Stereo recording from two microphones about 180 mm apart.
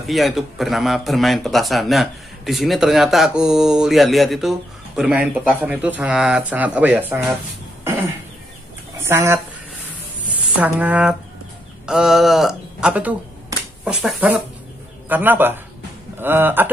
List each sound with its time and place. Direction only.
0.1 s speech: centre (ahead or behind)
9.0 s speech: 15° right (ahead or behind)
10.5 s speech: 10° right (ahead or behind)
13.5 s a sound: 20° right (ahead or behind)
13.8 s speech: 5° right (ahead or behind)